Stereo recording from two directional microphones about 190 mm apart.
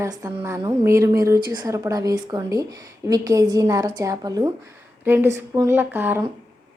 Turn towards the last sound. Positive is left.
turn(degrees=-10)  # may be behind; listen again after turning